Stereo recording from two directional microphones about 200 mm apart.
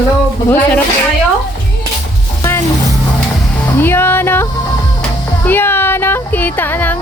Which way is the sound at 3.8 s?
10° left (ahead or behind).